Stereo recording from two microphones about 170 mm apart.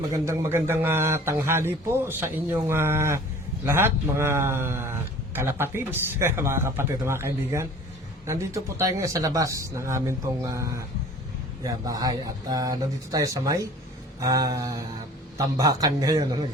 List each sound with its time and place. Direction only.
0.1 s speech: 15° right (ahead or behind)